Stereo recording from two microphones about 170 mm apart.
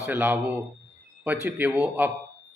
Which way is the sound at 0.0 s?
10° right (ahead or behind).